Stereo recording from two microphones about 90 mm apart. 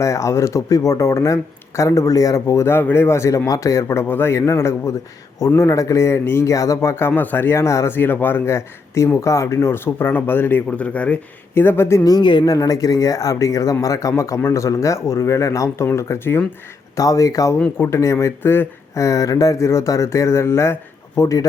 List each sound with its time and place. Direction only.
0.0 s speech: 35° left (ahead or behind)
7.9 s speech: 20° left (ahead or behind)
11.5 s speech: 25° left (ahead or behind)
12.0 s speech: 55° left (ahead or behind); by 16.4 s 25° left (ahead or behind)
16.9 s speech: 35° left (ahead or behind)
18.9 s speech: 40° left (ahead or behind)